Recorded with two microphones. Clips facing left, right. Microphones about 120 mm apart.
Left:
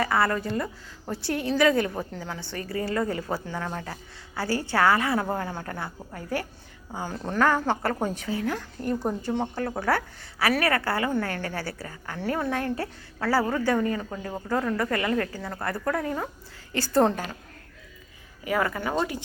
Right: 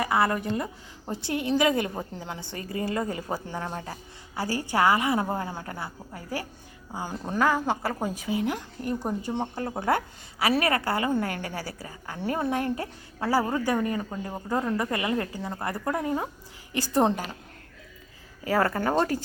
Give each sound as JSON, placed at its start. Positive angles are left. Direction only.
{"t": 0.0, "sound": "a woman's voice", "side_deg": -20}
{"t": 18.4, "sound": "speech", "side_deg": -35}